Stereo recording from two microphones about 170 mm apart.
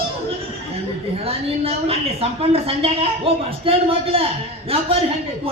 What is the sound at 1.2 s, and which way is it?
A woman's voice, 35° right (ahead or behind).